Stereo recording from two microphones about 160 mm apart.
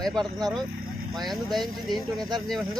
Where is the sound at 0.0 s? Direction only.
5° left (ahead or behind).